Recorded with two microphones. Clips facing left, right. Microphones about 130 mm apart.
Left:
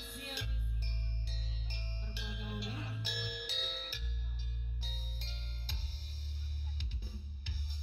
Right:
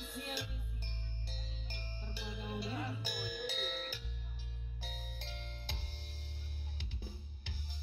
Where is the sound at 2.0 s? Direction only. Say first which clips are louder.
Right 3 dB; 35° right (ahead or behind).